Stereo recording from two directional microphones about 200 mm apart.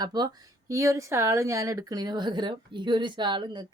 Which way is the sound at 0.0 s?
20° right (ahead or behind).